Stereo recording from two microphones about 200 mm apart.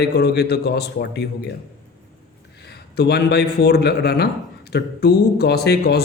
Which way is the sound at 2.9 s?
55° left (ahead or behind).